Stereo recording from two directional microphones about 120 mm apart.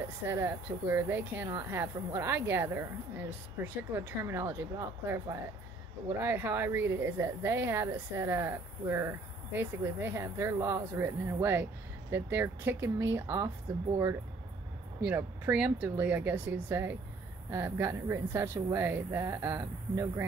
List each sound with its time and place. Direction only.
0.3 s speech: 20° right (ahead or behind)
15.0 s speech: 15° right (ahead or behind)